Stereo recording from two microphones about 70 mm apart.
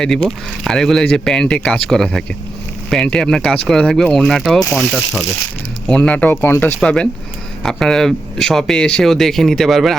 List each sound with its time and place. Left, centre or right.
0.0 s speech: centre
4.7 s ratchet: centre
5.9 s speech: centre
6.8 s speech: centre